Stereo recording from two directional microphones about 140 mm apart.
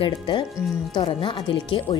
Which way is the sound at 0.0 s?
35° left (ahead or behind).